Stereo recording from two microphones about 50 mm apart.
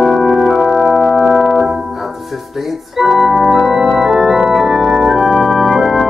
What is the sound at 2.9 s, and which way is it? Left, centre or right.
Organ, centre.